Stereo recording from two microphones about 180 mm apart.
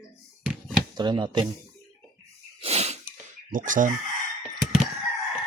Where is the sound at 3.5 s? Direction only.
50° right (ahead or behind).